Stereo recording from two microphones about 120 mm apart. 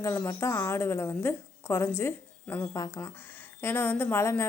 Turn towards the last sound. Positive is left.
turn(degrees=20)  # may be behind; listen again after turning